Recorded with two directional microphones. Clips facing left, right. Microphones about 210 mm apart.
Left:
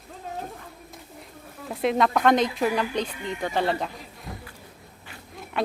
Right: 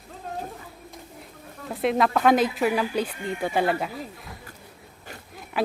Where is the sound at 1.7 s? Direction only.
Centre (ahead or behind).